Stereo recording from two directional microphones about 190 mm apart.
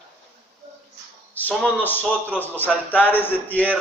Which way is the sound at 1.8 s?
10° left (ahead or behind).